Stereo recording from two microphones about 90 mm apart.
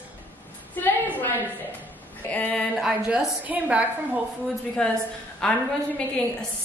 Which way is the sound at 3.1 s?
15° right (ahead or behind).